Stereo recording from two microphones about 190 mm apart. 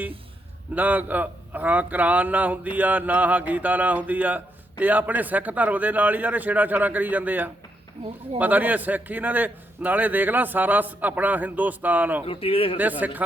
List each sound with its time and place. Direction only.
0.7 s a man's voice: 10° right (ahead or behind)
12.2 s speech: 30° left (ahead or behind)
12.7 s a man's voice: 10° right (ahead or behind)